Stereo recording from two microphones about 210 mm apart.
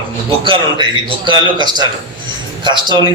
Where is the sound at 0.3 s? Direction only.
25° right (ahead or behind).